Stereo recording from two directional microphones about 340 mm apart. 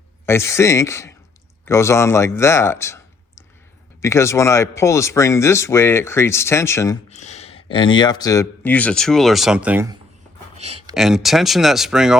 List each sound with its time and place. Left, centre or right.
0.3 s speech: centre
10.6 s a sound: centre
10.9 s speech: centre